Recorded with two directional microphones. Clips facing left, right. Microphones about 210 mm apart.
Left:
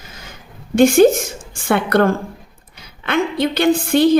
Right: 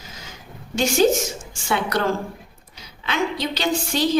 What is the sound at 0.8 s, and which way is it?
A woman's voice, 55° left (ahead or behind).